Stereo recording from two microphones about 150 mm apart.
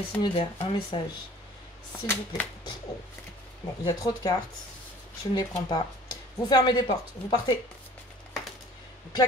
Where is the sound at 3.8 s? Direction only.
25° left (ahead or behind).